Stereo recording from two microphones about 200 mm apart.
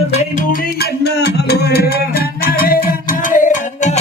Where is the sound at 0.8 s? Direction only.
55° left (ahead or behind).